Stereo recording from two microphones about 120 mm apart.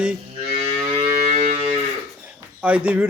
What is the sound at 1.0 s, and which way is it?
Music, 65° right (ahead or behind).